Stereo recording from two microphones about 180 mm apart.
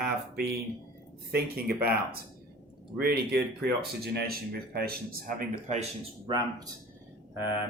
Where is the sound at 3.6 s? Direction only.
65° right (ahead or behind).